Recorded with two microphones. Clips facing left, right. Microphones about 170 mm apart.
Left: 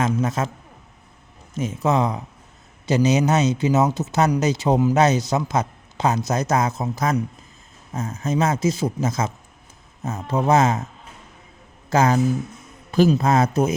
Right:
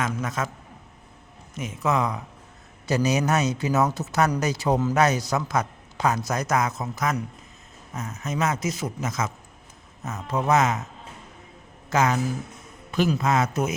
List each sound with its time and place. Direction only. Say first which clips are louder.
0.0 s a man's voice: left 6 dB; 25° left (ahead or behind)
1.5 s a man's voice: left 4 dB; 30° left (ahead or behind)
11.9 s a man's voice: left 5 dB; 35° left (ahead or behind)